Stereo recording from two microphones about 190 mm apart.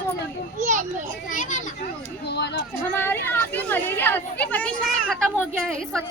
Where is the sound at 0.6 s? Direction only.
40° right (ahead or behind).